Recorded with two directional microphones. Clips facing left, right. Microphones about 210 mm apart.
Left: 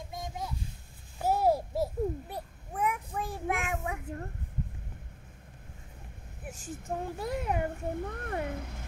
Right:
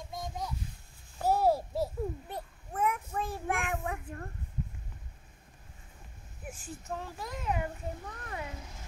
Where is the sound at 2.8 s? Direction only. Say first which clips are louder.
Even; 10° left (ahead or behind).